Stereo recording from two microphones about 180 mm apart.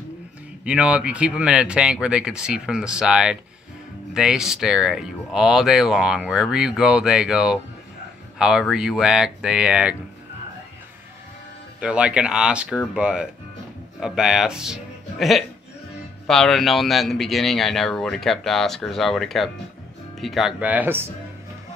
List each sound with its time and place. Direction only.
0.7 s speech: 5° right (ahead or behind)
11.8 s speech: 5° right (ahead or behind)